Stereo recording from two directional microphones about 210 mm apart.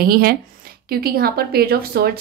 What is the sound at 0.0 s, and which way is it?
A woman's voice, 45° right (ahead or behind).